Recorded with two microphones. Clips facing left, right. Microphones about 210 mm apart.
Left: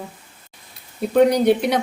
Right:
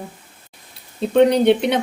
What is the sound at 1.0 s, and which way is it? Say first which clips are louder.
Speech: right 1 dB; 25° right (ahead or behind).